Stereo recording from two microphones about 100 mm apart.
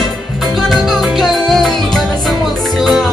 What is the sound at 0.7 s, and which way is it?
Music, centre (ahead or behind).